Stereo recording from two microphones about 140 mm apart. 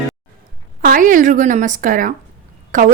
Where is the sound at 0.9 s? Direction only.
75° right (ahead or behind).